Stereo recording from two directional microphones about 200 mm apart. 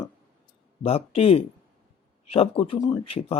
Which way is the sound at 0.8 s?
30° left (ahead or behind).